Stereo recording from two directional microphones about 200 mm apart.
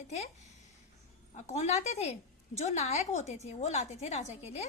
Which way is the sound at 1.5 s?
35° left (ahead or behind).